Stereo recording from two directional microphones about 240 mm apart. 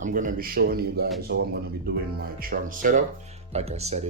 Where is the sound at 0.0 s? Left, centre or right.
Right.